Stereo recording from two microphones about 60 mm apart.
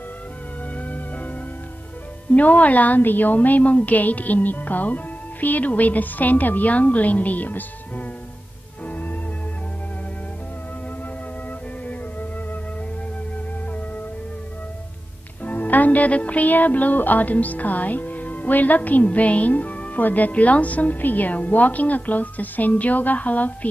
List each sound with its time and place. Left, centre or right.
0.7 s music: left
2.3 s speech: left
8.8 s organ: left
15.4 s speech: left